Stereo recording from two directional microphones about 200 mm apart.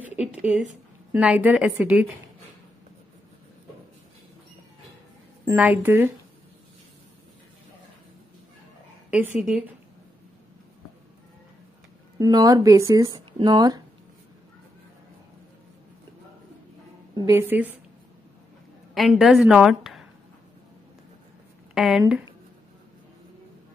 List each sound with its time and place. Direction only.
0.4 s a woman's voice: 5° right (ahead or behind)
5.4 s a woman's voice: 10° right (ahead or behind)
9.1 s a woman's voice: 5° right (ahead or behind)
12.2 s speech: 20° right (ahead or behind)
17.3 s a woman's voice: 10° right (ahead or behind)
18.9 s a woman's voice: centre (ahead or behind)
21.7 s speech: centre (ahead or behind)